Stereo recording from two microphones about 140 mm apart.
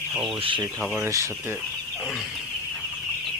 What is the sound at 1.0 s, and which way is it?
Speech, 20° right (ahead or behind).